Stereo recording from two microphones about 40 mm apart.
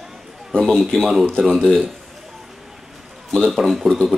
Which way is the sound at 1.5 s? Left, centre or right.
Centre.